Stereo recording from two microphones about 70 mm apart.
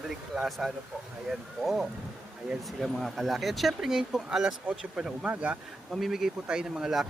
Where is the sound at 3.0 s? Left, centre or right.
Centre.